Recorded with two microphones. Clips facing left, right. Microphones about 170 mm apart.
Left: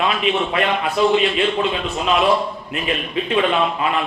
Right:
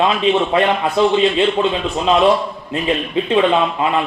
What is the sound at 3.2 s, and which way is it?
Speech, 25° right (ahead or behind).